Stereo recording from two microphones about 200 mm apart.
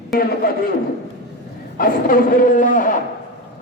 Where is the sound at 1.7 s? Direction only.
45° left (ahead or behind).